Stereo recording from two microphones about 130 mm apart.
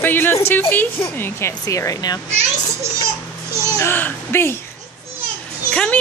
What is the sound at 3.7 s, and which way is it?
Speech, 20° left (ahead or behind).